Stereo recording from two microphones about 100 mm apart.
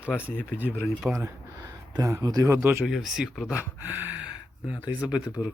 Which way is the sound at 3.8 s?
20° right (ahead or behind).